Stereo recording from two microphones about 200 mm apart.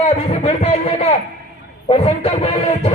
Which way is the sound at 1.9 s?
30° left (ahead or behind).